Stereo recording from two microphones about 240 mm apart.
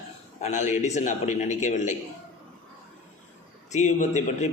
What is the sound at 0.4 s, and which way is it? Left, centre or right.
A man's voice, left.